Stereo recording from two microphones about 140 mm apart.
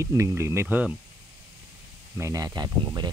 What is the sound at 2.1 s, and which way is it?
Speech, 25° right (ahead or behind).